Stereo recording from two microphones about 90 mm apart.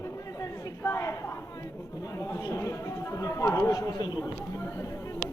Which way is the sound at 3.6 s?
40° left (ahead or behind).